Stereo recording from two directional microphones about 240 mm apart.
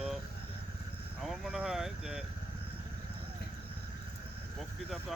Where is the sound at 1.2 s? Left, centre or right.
Centre.